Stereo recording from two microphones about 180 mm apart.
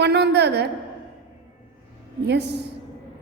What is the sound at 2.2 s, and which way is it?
Speech, 70° right (ahead or behind).